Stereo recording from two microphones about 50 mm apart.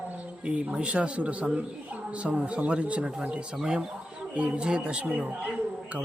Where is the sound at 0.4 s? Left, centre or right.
Right.